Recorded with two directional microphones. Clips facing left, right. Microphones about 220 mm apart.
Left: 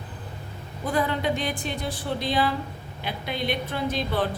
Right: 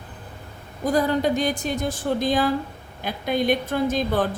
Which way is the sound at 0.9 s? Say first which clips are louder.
Right 5 dB; 40° right (ahead or behind).